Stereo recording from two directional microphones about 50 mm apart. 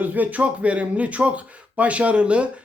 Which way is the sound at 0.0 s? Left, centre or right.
Right.